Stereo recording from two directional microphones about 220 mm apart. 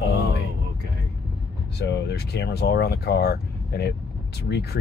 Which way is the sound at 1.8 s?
50° left (ahead or behind).